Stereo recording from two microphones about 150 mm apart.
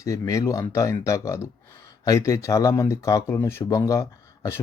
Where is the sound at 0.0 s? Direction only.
20° left (ahead or behind).